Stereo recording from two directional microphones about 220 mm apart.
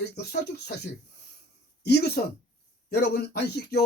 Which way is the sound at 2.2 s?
40° left (ahead or behind).